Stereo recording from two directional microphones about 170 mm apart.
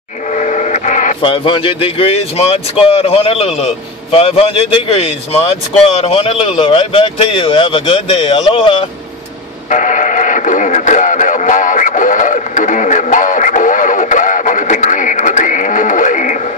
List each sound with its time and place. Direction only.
0.3 s printer: 45° left (ahead or behind)
1.2 s speech: 30° left (ahead or behind)
9.7 s radio: 45° left (ahead or behind)